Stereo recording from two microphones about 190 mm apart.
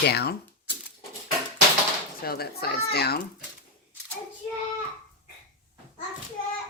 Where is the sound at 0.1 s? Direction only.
60° left (ahead or behind).